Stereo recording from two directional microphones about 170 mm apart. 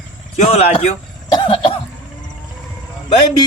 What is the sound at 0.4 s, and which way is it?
Speech, 35° left (ahead or behind).